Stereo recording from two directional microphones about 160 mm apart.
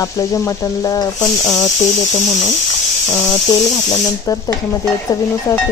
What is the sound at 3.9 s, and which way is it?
A woman's voice, 20° left (ahead or behind).